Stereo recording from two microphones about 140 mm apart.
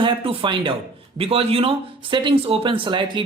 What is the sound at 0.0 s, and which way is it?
Speech, 35° right (ahead or behind).